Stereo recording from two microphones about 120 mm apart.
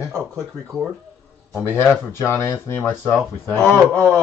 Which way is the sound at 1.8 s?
20° left (ahead or behind).